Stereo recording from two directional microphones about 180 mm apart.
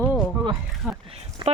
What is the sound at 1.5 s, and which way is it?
Speech, 35° right (ahead or behind).